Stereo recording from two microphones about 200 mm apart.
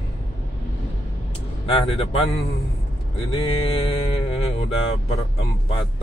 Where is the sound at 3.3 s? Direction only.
25° left (ahead or behind).